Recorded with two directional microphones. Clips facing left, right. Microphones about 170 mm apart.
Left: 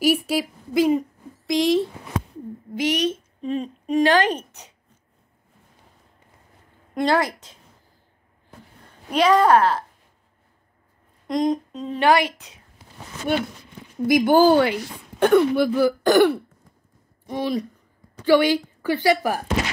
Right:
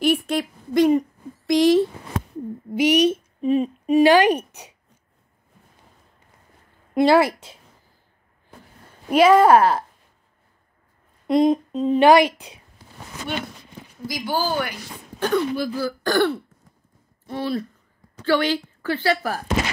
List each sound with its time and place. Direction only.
0.0 s speech: 5° left (ahead or behind)
2.7 s a woman's voice: 10° right (ahead or behind)
6.9 s a woman's voice: 10° right (ahead or behind)
9.1 s a woman's voice: 10° right (ahead or behind)
11.2 s speech: 10° right (ahead or behind)
11.5 s a sound: 25° right (ahead or behind)
11.9 s a woman's voice: 15° right (ahead or behind)
13.3 s speech: 45° left (ahead or behind); by 15.8 s 60° left (ahead or behind)
15.8 s a woman's voice: 20° left (ahead or behind)